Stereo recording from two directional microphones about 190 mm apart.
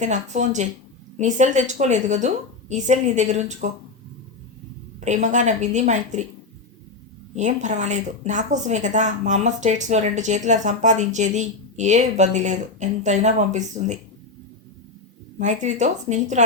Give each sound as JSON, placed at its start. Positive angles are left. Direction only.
{"t": 0.0, "sound": "a woman's voice", "side_deg": -40}
{"t": 4.9, "sound": "a woman's voice", "side_deg": -40}
{"t": 7.3, "sound": "a woman's voice", "side_deg": -40}
{"t": 15.4, "sound": "a woman's voice", "side_deg": -40}